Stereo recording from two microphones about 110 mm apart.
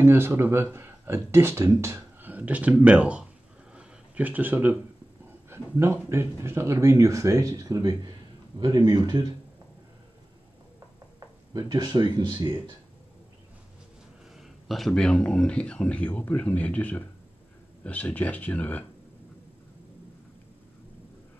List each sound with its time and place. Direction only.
0.0 s speech: 20° right (ahead or behind)
3.7 s a sound: 15° right (ahead or behind)
5.5 s speech: 25° right (ahead or behind)
11.1 s speech: 35° right (ahead or behind)
14.3 s speech: centre (ahead or behind); by 18.9 s 15° left (ahead or behind)